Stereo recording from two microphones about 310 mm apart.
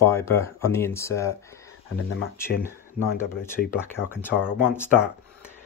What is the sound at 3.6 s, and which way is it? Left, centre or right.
Speech, left.